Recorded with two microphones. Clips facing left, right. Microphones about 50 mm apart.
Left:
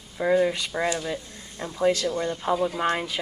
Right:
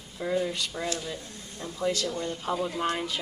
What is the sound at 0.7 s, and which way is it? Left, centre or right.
Speech, left.